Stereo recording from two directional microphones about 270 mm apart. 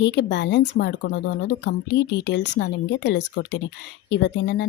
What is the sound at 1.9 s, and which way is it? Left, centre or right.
A woman's voice, left.